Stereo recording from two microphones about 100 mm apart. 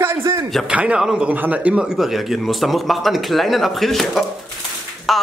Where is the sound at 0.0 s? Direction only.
25° right (ahead or behind).